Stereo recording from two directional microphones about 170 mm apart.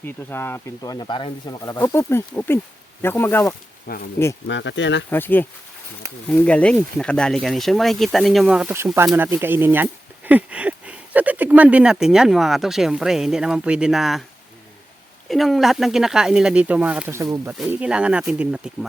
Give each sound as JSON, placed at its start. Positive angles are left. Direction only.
{"t": 0.0, "sound": "speech", "side_deg": 10}
{"t": 3.9, "sound": "speech", "side_deg": 60}
{"t": 4.4, "sound": "speech", "side_deg": 90}
{"t": 5.1, "sound": "speech", "side_deg": 10}
{"t": 15.3, "sound": "speech", "side_deg": 0}
{"t": 17.7, "sound": "speech", "side_deg": -5}